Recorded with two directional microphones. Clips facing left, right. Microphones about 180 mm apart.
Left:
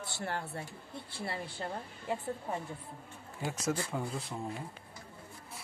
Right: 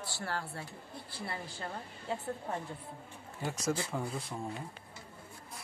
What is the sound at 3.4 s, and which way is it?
Speech, 5° left (ahead or behind).